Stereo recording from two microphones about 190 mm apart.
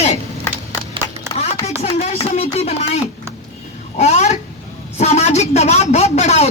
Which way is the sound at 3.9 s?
35° left (ahead or behind).